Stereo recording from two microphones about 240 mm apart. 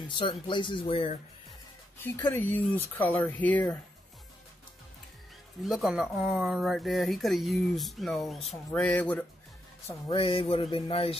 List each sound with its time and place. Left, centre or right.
0.1 s speech: left
2.0 s speech: centre
5.6 s speech: centre
9.8 s speech: centre